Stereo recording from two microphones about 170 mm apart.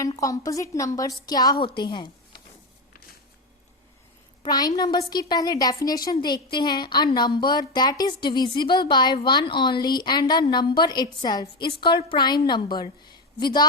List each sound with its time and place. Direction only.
0.0 s a woman's voice: 20° left (ahead or behind)
4.4 s a woman's voice: 25° left (ahead or behind)